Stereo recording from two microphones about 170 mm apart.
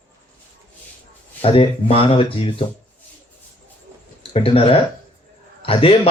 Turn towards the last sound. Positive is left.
turn(degrees=35)  # may be behind; listen again after turning